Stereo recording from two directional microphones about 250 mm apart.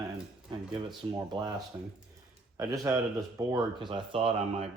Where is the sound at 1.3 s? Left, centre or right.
Centre.